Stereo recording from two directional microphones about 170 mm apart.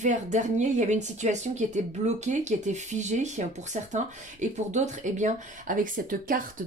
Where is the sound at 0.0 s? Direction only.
45° right (ahead or behind).